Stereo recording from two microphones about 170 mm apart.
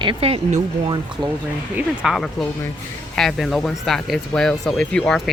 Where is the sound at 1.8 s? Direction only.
Centre (ahead or behind).